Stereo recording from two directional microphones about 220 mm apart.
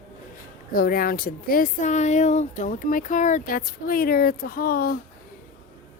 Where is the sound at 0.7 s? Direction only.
40° left (ahead or behind).